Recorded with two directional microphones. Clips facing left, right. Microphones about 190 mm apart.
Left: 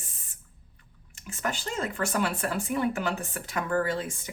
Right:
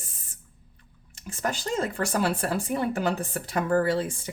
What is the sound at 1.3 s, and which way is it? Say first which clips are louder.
Speech: right 4 dB; 35° right (ahead or behind).